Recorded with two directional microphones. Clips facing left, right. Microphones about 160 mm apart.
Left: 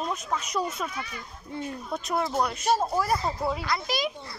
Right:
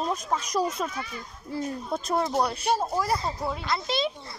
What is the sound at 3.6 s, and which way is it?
Speech, 25° right (ahead or behind).